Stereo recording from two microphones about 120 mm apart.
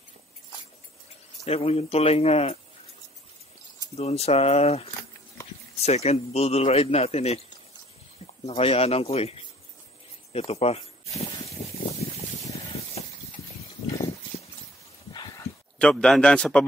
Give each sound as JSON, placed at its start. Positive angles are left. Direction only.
{"t": 1.4, "sound": "a man's voice", "side_deg": 60}
{"t": 3.9, "sound": "a man's voice", "side_deg": 60}
{"t": 8.5, "sound": "a man's voice", "side_deg": 55}
{"t": 13.0, "sound": "a sound", "side_deg": 55}
{"t": 15.8, "sound": "speech", "side_deg": 5}